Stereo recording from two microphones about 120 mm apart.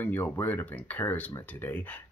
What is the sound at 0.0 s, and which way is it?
Speech, 15° left (ahead or behind).